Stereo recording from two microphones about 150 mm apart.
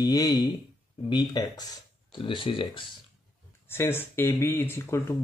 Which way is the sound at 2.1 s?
35° left (ahead or behind).